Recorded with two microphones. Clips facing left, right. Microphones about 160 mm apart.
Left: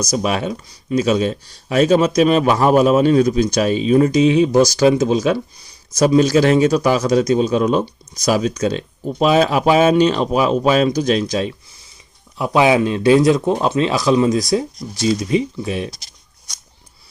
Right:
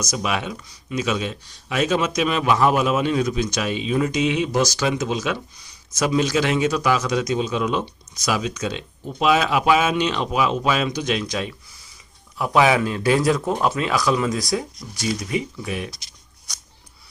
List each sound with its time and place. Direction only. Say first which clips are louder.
0.0 s a man's voice: left 6 dB; 35° left (ahead or behind)